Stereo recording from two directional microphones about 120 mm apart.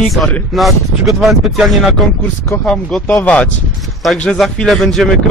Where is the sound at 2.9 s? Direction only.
10° left (ahead or behind).